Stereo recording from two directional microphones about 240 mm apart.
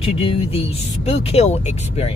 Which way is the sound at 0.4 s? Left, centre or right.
Left.